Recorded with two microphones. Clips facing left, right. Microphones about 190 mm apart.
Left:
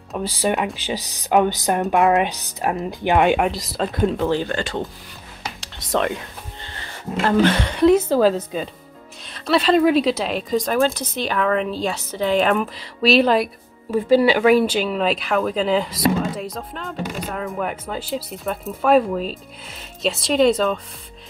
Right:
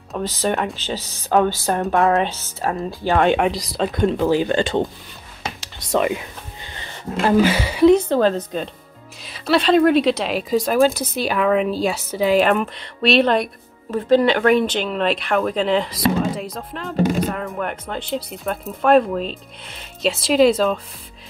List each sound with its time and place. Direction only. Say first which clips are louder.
0.2 s speech: even; 10° left (ahead or behind)
3.3 s speech: right 1 dB; centre (ahead or behind)
4.3 s speech: right 4 dB; 15° right (ahead or behind)
5.6 s whispering: right 2 dB; centre (ahead or behind)
7.2 s speech: right 1 dB; 5° right (ahead or behind)